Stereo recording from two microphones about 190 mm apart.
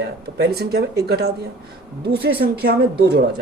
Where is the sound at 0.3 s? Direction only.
55° right (ahead or behind).